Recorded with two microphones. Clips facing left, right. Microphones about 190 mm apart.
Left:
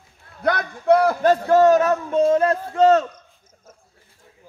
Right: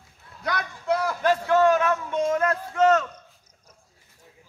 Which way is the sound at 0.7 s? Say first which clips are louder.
Left 10 dB; 60° left (ahead or behind).